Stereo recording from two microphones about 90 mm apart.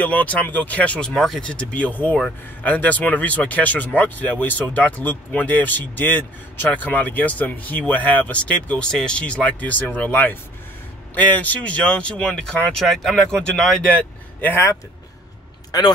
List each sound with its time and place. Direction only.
0.0 s speech: 15° left (ahead or behind)
1.5 s speech: 15° left (ahead or behind)
14.4 s speech: 20° left (ahead or behind)